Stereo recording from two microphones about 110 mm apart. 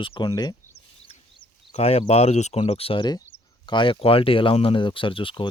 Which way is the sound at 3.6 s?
45° left (ahead or behind).